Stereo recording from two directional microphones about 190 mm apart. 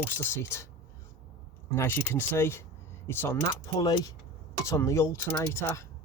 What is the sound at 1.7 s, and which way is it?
Speech, 15° left (ahead or behind).